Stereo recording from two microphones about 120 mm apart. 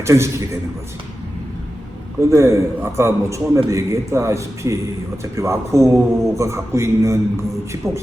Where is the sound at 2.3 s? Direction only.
25° right (ahead or behind).